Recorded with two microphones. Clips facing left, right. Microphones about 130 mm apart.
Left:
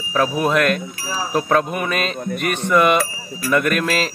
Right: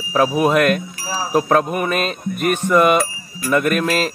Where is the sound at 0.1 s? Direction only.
10° right (ahead or behind).